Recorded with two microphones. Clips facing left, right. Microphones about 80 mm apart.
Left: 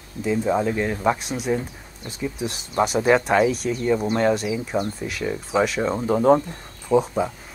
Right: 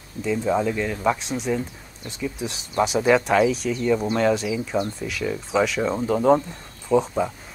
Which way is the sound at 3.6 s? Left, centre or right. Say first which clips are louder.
Left 1 dB; left.